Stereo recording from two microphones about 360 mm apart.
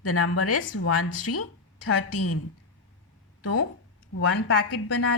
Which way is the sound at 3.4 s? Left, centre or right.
Left.